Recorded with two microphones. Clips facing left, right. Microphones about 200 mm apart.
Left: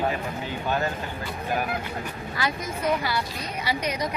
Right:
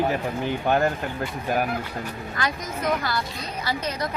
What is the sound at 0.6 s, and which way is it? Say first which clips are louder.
Speech: right 5 dB; 60° right (ahead or behind).